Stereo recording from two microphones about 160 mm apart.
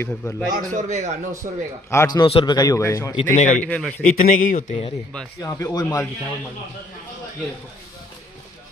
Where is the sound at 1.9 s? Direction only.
20° left (ahead or behind).